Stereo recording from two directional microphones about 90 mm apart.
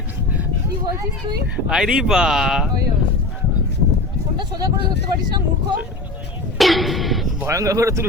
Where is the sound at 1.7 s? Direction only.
5° right (ahead or behind).